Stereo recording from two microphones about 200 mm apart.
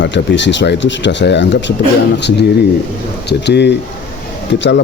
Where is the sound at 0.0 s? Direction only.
60° left (ahead or behind).